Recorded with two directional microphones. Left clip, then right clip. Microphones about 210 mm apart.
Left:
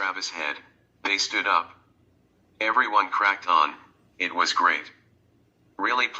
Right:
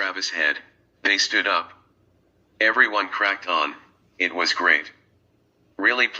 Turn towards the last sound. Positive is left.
turn(degrees=-15)  # may be behind; listen again after turning